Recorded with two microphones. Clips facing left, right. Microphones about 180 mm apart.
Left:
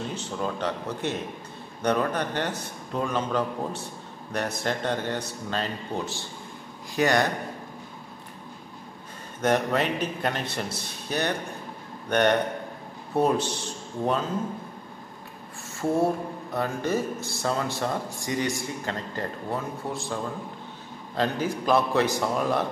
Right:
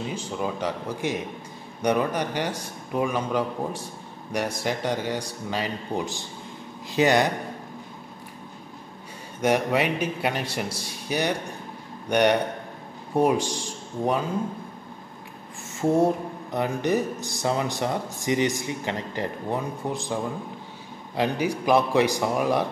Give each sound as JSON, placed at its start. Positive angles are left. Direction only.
{"t": 0.0, "sound": "a man's voice", "side_deg": -10}
{"t": 9.4, "sound": "speech", "side_deg": -10}
{"t": 15.8, "sound": "speech", "side_deg": -20}